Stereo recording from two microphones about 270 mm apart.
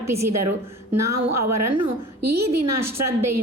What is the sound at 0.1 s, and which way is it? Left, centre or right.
A woman's voice, right.